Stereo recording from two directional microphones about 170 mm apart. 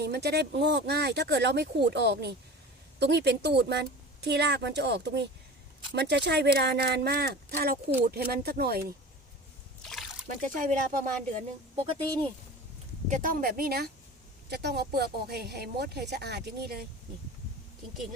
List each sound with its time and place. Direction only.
0.0 s speech: 70° right (ahead or behind)
10.2 s speech: 50° right (ahead or behind)
13.1 s speech: 50° right (ahead or behind)
14.5 s speech: 75° right (ahead or behind)